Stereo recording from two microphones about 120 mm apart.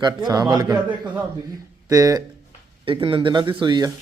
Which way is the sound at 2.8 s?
45° right (ahead or behind).